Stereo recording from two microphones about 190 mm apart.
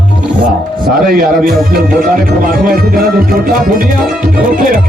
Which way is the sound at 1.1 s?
50° right (ahead or behind).